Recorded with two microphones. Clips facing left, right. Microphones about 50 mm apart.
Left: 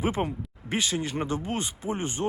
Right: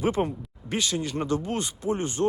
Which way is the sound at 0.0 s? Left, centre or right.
Left.